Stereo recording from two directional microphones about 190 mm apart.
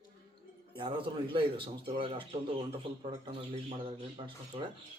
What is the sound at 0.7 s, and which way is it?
Speech, 25° right (ahead or behind).